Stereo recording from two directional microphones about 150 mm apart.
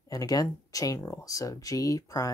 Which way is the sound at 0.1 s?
25° left (ahead or behind).